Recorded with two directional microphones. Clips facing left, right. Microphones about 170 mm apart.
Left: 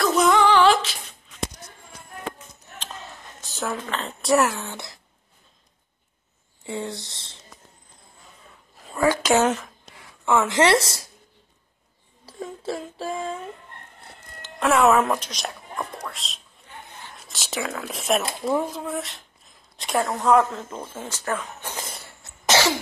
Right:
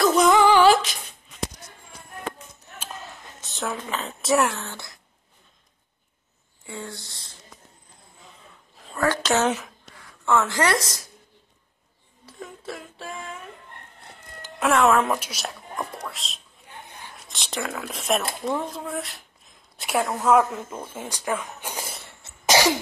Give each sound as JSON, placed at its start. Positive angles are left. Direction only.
{"t": 0.0, "sound": "female singing", "side_deg": 0}
{"t": 3.3, "sound": "a sound", "side_deg": 0}
{"t": 3.8, "sound": "speech", "side_deg": 0}
{"t": 4.6, "sound": "speech", "side_deg": 15}
{"t": 6.6, "sound": "a woman's voice", "side_deg": 25}
{"t": 8.7, "sound": "a woman's voice", "side_deg": 10}
{"t": 9.9, "sound": "a sound", "side_deg": 20}
{"t": 10.5, "sound": "a woman's voice", "side_deg": 25}
{"t": 12.3, "sound": "a sound", "side_deg": 30}
{"t": 14.6, "sound": "speech", "side_deg": 5}
{"t": 16.8, "sound": "a sound", "side_deg": -15}
{"t": 17.3, "sound": "a woman's voice", "side_deg": 0}
{"t": 21.9, "sound": "cough", "side_deg": 0}
{"t": 22.5, "sound": "cough", "side_deg": -15}